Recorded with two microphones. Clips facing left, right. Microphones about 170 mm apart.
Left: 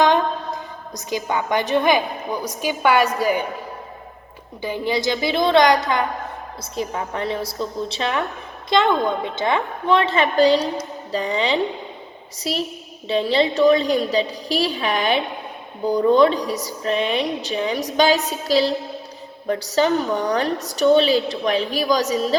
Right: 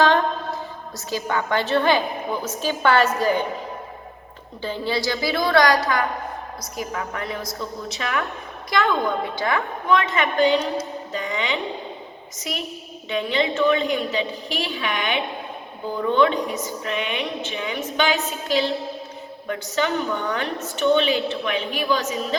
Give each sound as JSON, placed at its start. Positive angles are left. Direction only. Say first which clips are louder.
{"t": 0.0, "sound": "a woman's voice", "louder": "left 1 dB", "side_deg": 15}
{"t": 4.6, "sound": "a woman's voice", "louder": "left 3 dB", "side_deg": 15}
{"t": 8.7, "sound": "a woman's voice", "louder": "left 3 dB", "side_deg": 20}